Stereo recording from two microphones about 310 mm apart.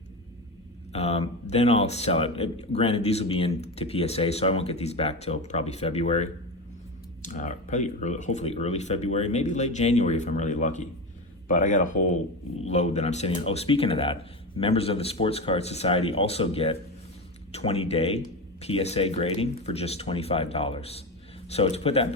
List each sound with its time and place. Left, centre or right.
0.9 s a man's voice: centre